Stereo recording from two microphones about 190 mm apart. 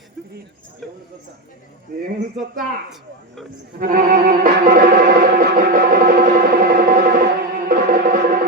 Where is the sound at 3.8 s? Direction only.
50° right (ahead or behind).